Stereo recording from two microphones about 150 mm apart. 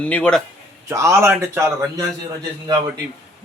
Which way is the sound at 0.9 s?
20° right (ahead or behind).